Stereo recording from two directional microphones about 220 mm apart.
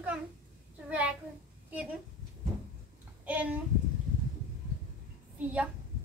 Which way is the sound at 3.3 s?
5° right (ahead or behind).